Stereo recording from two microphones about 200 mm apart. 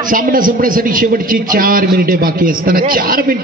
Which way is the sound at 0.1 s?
45° right (ahead or behind).